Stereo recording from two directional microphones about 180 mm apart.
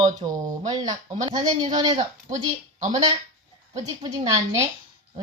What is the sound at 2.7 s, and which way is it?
A woman's voice, 35° right (ahead or behind).